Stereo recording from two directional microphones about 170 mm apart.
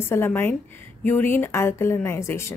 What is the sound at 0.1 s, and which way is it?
A woman's voice, 15° left (ahead or behind).